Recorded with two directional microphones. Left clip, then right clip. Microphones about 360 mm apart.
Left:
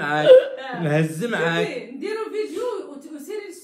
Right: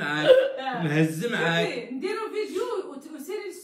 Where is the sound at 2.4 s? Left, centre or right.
Centre.